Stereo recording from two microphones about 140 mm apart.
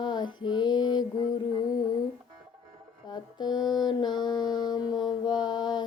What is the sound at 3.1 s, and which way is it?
Mantra, 30° left (ahead or behind).